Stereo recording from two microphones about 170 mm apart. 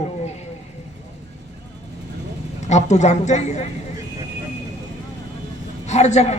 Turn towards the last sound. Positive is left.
turn(degrees=40)  # may be behind; listen again after turning